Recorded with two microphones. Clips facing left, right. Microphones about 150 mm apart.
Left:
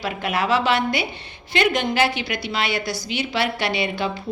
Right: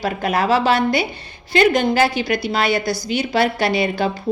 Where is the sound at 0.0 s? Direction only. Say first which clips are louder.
Right 4 dB; 40° right (ahead or behind).